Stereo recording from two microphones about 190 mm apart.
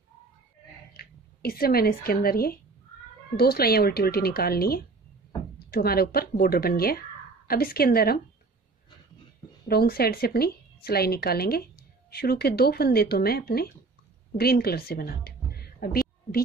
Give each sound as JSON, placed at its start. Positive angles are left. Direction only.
{"t": 0.9, "sound": "speech", "side_deg": 50}
{"t": 9.7, "sound": "a woman's voice", "side_deg": 55}